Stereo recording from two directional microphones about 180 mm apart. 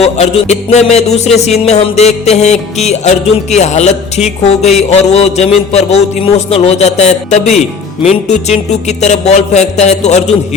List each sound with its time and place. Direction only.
0.0 s music: 35° left (ahead or behind)